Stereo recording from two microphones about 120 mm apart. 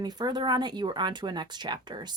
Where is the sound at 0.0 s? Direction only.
35° right (ahead or behind).